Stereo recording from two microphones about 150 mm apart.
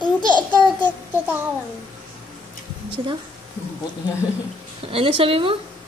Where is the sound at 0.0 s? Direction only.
30° left (ahead or behind).